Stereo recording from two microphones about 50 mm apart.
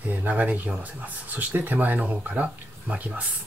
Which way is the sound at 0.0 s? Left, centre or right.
Right.